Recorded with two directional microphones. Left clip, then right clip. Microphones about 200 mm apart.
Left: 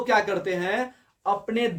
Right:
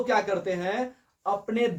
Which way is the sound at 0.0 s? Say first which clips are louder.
Left 2 dB; 25° left (ahead or behind).